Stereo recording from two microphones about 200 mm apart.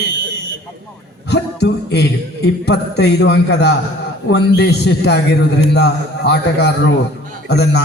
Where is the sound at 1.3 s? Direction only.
55° left (ahead or behind).